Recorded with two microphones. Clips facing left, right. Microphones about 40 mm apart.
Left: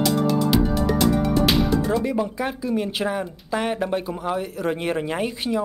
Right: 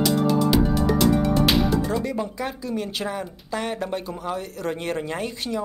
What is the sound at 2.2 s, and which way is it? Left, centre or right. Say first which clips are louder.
Speech: left 3 dB; centre.